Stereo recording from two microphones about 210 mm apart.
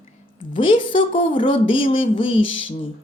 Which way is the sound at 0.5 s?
25° left (ahead or behind).